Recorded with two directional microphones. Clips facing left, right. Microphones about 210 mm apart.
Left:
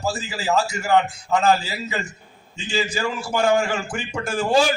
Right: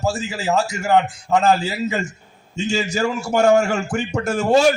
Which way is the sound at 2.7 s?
45° right (ahead or behind).